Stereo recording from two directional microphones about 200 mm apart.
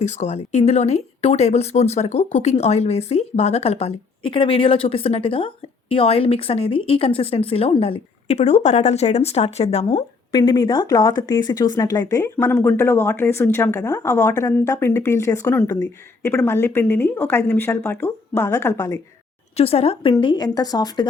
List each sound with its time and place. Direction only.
0.0 s speech: 35° left (ahead or behind)
10.3 s speech: 20° left (ahead or behind)
19.5 s speech: 30° left (ahead or behind)